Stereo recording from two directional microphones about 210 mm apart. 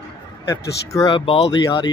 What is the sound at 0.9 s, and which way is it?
Speech, 20° left (ahead or behind).